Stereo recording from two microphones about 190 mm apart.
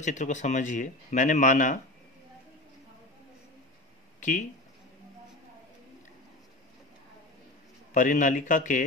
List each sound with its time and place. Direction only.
0.0 s speech: 40° left (ahead or behind)
4.2 s speech: 40° left (ahead or behind)
7.9 s speech: 45° left (ahead or behind)